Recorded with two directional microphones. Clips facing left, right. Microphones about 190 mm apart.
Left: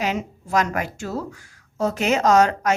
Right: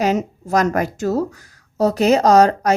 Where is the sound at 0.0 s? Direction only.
40° right (ahead or behind).